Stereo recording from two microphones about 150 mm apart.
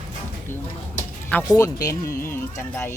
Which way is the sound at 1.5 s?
25° left (ahead or behind).